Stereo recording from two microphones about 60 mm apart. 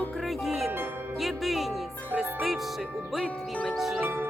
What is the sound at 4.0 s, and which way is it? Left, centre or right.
Music, right.